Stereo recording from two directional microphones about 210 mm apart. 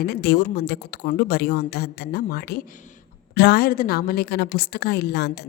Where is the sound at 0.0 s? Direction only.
50° left (ahead or behind).